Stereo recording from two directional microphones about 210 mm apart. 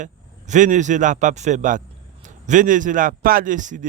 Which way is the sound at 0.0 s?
35° right (ahead or behind).